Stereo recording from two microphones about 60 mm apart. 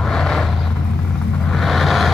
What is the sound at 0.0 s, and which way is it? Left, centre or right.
Vehicle, centre.